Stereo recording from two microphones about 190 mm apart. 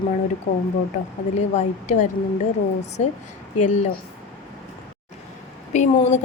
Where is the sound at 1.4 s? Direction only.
35° left (ahead or behind).